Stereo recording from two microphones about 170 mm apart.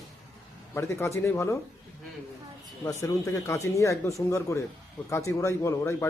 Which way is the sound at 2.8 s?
20° left (ahead or behind).